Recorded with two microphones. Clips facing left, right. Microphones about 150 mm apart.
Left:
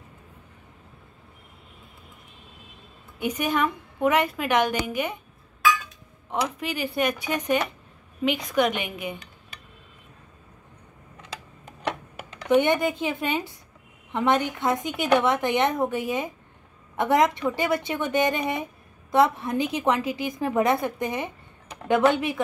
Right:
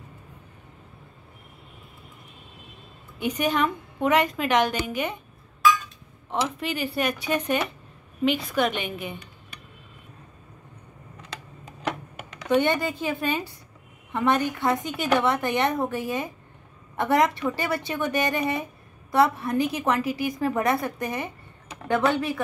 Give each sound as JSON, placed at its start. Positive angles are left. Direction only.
{"t": 3.2, "sound": "a woman's voice", "side_deg": 10}
{"t": 6.6, "sound": "a woman's voice", "side_deg": 15}
{"t": 12.4, "sound": "a woman's voice", "side_deg": 15}